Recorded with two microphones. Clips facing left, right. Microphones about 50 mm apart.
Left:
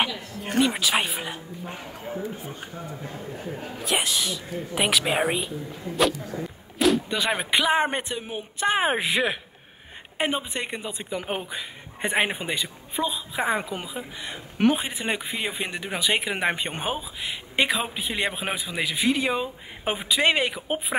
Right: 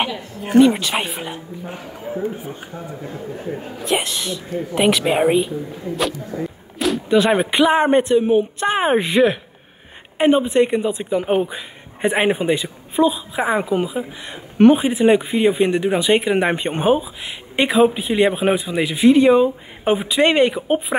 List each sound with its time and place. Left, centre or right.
0.4 s speech: centre
3.4 s speech: right
3.8 s speech: centre